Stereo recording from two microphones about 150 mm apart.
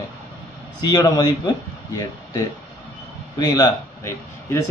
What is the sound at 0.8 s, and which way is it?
A man's voice, 25° left (ahead or behind).